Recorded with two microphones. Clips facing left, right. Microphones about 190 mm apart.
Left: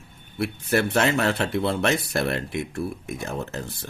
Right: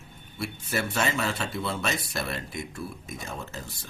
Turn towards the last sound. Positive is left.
turn(degrees=60)  # may be behind; listen again after turning